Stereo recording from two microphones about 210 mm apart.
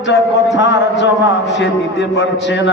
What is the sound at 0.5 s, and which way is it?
Speech, 60° left (ahead or behind).